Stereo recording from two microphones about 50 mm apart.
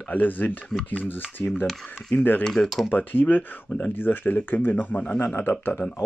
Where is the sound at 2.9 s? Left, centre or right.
Left.